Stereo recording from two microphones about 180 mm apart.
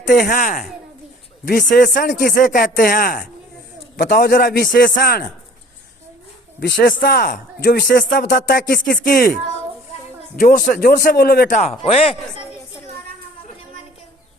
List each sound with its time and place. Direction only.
0.1 s speech: 55° left (ahead or behind)
1.7 s speech: 55° left (ahead or behind)
3.9 s speech: 70° left (ahead or behind); by 5.3 s 55° left (ahead or behind)
6.6 s speech: 60° left (ahead or behind)
10.3 s a man's voice: 45° left (ahead or behind)